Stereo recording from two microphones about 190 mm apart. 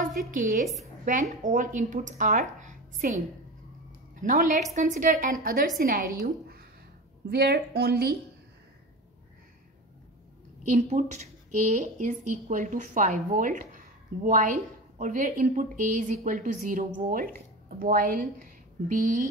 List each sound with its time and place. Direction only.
0.0 s a woman's voice: 45° right (ahead or behind)
10.7 s a woman's voice: 40° right (ahead or behind)